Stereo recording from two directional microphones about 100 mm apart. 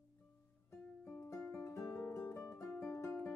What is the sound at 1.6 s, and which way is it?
Music, 20° left (ahead or behind).